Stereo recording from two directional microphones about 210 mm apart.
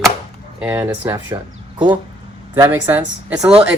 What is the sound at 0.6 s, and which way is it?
Speech, 10° right (ahead or behind).